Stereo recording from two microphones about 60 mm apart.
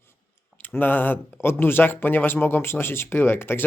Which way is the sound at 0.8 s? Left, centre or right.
Left.